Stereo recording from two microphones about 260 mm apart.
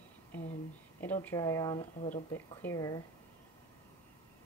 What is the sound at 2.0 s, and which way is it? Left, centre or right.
Speech, left.